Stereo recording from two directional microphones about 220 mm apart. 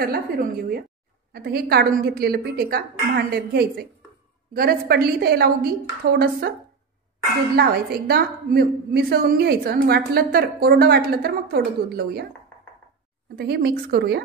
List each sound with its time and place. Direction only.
0.0 s a woman's voice: 40° right (ahead or behind)
7.5 s a woman's voice: 45° right (ahead or behind)
13.4 s a woman's voice: 45° right (ahead or behind)